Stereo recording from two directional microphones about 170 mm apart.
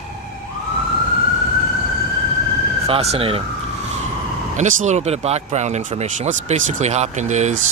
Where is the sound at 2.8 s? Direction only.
35° right (ahead or behind).